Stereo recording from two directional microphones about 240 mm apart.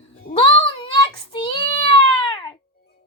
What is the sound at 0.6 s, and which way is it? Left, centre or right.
Child singing, left.